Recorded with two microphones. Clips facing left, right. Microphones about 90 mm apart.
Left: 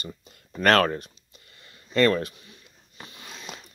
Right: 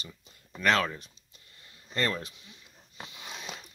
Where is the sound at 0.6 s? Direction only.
60° left (ahead or behind).